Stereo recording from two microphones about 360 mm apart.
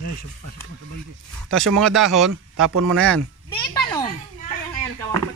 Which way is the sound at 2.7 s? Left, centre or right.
Right.